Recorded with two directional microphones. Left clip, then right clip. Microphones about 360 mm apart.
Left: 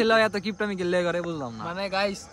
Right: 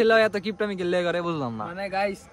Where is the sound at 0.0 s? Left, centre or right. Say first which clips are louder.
Right 2 dB; centre.